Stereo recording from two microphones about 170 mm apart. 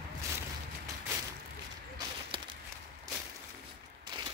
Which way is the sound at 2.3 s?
30° right (ahead or behind).